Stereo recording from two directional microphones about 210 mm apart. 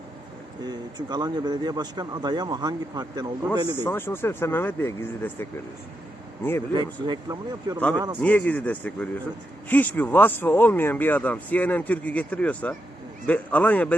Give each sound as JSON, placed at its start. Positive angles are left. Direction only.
{"t": 0.6, "sound": "speech", "side_deg": -20}
{"t": 3.8, "sound": "speech", "side_deg": 10}
{"t": 6.7, "sound": "speech", "side_deg": -20}
{"t": 8.2, "sound": "speech", "side_deg": 5}